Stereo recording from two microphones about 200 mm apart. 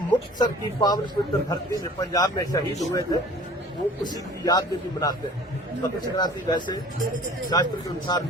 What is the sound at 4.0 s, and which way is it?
Speech, 20° left (ahead or behind).